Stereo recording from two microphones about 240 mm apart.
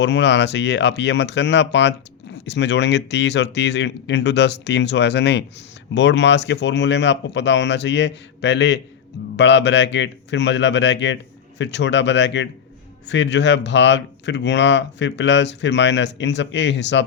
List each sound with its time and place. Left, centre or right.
0.0 s speech: left